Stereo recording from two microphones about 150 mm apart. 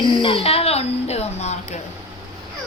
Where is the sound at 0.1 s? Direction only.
35° left (ahead or behind).